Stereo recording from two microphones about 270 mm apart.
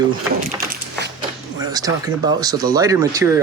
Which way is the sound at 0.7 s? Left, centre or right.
Right.